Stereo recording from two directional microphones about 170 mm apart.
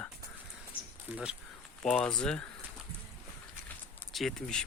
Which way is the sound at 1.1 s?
10° right (ahead or behind).